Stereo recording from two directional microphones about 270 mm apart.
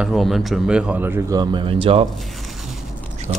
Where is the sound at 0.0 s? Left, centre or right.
Centre; by 2.0 s right.